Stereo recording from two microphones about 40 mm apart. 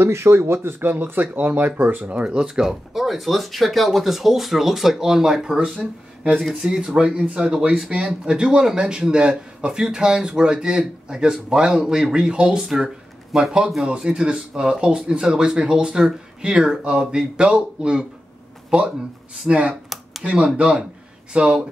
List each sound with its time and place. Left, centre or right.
0.0 s speech: right
2.0 s speech: right
2.6 s speech: centre
6.6 s a man's voice: centre
19.5 s speech: right
19.9 s a sound: centre
20.2 s speech: right